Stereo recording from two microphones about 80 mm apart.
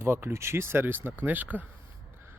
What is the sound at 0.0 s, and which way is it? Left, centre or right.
Speech, right.